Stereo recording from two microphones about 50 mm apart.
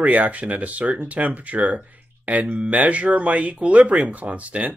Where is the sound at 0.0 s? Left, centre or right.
Right.